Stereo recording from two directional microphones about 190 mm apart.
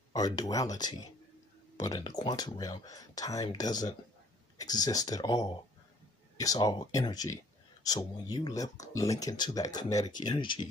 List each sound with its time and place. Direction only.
0.1 s speech: 20° left (ahead or behind)